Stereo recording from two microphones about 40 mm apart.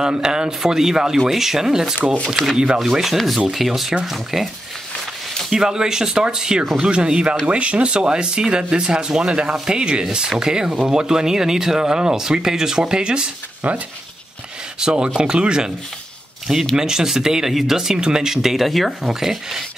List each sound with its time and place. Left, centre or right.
0.2 s speech: centre
2.5 s speech: right
3.0 s rub: centre
4.0 s speech: centre
5.5 s speech: centre
13.6 s speech: right
14.8 s speech: centre
16.7 s speech: centre